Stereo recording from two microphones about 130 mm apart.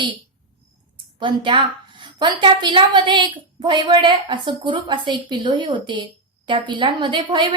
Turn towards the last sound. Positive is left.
turn(degrees=-35)  # may be behind; listen again after turning